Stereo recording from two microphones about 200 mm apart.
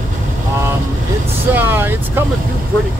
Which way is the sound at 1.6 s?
10° right (ahead or behind).